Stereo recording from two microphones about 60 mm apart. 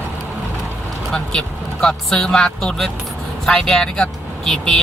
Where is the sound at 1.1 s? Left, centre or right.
Centre.